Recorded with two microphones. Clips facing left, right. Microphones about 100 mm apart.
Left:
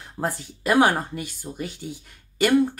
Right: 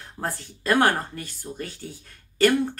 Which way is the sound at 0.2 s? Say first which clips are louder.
Left 3 dB; 15° left (ahead or behind).